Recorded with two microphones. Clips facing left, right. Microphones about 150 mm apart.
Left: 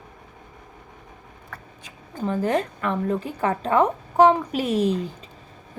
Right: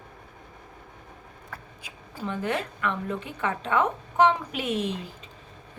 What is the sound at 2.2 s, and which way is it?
A woman's voice, 35° left (ahead or behind).